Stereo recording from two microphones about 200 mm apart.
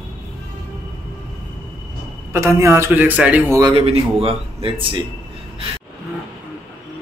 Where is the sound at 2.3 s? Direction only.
15° right (ahead or behind).